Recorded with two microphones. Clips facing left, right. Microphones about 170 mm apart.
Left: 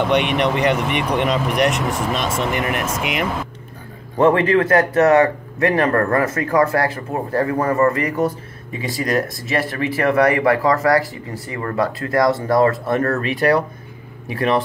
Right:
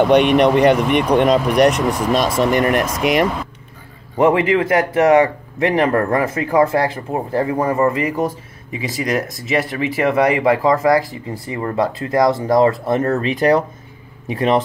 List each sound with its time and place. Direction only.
0.1 s speech: 45° right (ahead or behind)
4.2 s speech: 15° right (ahead or behind)